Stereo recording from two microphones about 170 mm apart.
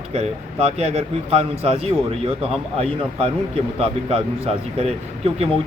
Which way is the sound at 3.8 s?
35° right (ahead or behind).